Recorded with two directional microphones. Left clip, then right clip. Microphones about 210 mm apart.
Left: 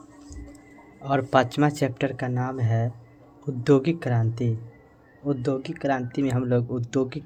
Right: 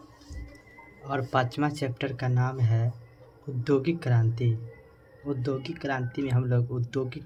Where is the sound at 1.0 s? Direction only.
45° left (ahead or behind).